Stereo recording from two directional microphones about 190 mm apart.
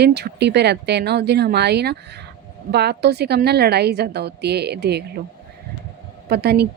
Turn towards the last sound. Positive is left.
turn(degrees=-60)  # may be behind; listen again after turning